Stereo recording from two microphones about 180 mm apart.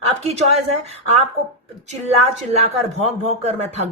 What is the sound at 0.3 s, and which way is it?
Speech, 35° right (ahead or behind).